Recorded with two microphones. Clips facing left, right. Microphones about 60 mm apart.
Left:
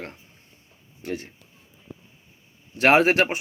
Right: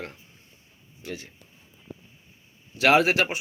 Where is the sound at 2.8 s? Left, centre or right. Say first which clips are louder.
Left 2 dB; left.